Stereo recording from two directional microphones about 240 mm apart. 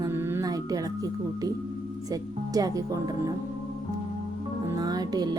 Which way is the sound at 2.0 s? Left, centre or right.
Centre.